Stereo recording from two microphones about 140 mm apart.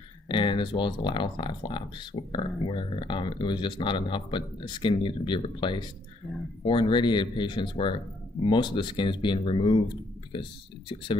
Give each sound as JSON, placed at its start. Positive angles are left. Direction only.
{"t": 0.3, "sound": "speech", "side_deg": 35}